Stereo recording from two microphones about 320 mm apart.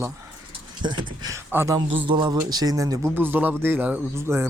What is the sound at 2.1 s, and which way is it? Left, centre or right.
Speech, centre.